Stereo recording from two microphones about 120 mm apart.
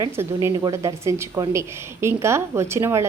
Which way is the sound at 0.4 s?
25° right (ahead or behind).